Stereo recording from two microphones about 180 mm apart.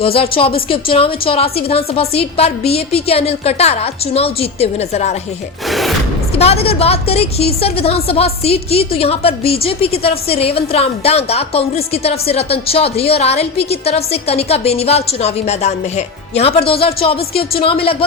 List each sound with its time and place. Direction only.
0.0 s a woman's voice: 30° left (ahead or behind)
5.6 s speech: centre (ahead or behind)
6.4 s a woman's voice: 35° left (ahead or behind)